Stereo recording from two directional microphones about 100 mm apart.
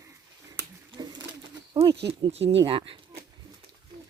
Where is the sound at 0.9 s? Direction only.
50° right (ahead or behind).